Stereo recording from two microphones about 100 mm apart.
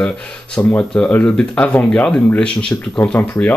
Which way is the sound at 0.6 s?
15° left (ahead or behind).